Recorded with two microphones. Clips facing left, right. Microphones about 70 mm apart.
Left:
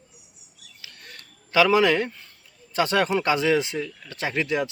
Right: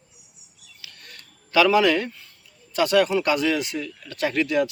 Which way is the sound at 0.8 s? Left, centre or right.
Left.